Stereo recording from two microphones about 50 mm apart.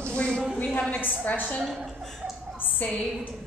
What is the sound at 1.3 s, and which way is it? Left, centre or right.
Speech, left.